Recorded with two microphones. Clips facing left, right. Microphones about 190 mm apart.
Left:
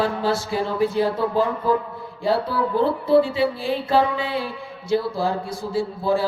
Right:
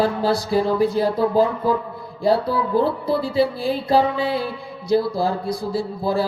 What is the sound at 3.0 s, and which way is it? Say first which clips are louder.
Music: left 2 dB; 40° right (ahead or behind).